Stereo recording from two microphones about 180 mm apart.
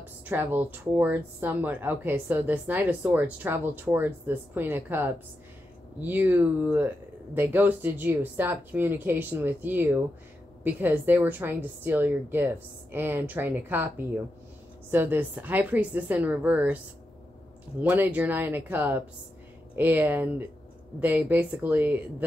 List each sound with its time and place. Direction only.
0.0 s speech: 10° right (ahead or behind)